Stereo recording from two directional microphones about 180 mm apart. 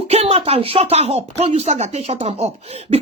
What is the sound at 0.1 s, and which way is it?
Speech, 35° right (ahead or behind).